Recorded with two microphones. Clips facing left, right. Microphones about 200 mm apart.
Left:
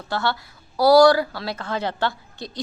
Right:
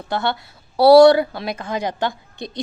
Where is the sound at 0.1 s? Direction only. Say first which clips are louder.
Right 2 dB; 20° right (ahead or behind).